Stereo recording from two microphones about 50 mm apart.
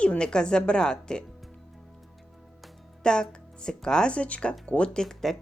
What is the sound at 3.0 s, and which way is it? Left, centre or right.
Speech, centre.